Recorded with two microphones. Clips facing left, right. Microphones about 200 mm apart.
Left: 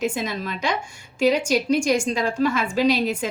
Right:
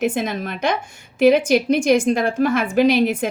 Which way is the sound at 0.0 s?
50° right (ahead or behind).